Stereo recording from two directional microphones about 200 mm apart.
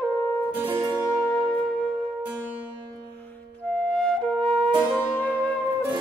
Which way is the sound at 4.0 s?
5° left (ahead or behind).